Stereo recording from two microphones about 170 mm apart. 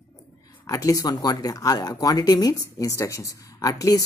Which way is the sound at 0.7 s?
20° left (ahead or behind).